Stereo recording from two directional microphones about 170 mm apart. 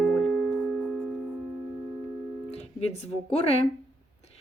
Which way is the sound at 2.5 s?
40° left (ahead or behind).